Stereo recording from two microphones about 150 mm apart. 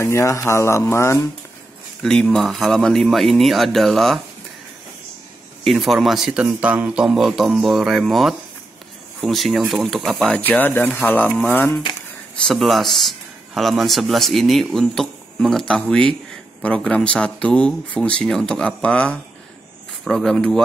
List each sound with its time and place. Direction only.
0.0 s speech: 20° left (ahead or behind)
2.0 s speech: 5° left (ahead or behind)
5.6 s speech: centre (ahead or behind)
12.4 s speech: centre (ahead or behind)